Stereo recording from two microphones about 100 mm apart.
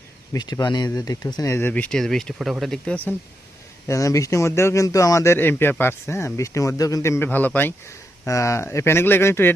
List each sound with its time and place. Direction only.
0.3 s speech: 45° left (ahead or behind)
1.5 s speech: 20° left (ahead or behind)
2.0 s speech: 5° left (ahead or behind)
3.8 s a man's voice: 30° left (ahead or behind)
8.3 s a man's voice: 30° left (ahead or behind)